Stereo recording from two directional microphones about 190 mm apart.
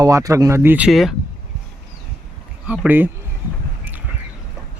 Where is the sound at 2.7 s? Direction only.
10° right (ahead or behind).